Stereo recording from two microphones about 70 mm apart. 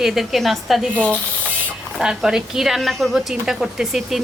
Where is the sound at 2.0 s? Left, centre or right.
Centre.